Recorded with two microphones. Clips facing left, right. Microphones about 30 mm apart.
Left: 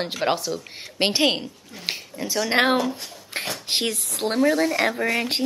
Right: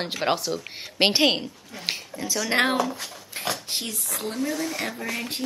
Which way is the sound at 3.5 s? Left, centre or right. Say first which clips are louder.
Left 6 dB; left.